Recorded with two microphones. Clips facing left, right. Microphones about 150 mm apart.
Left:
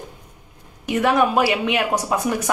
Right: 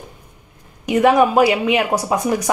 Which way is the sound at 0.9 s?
10° right (ahead or behind).